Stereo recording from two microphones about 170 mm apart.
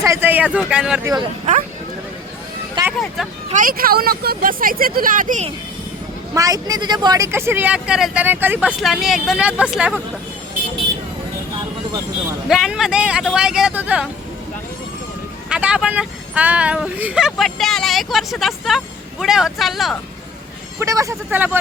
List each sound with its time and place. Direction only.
0.0 s speech: 15° right (ahead or behind)
1.0 s speech: 25° right (ahead or behind)
2.8 s music: 25° right (ahead or behind)
3.5 s speech: 55° right (ahead or behind)
6.3 s speech: 20° right (ahead or behind); by 10.0 s 5° right (ahead or behind)
12.5 s speech: centre (ahead or behind)
15.4 s speech: 5° right (ahead or behind)
20.7 s speech: 20° right (ahead or behind)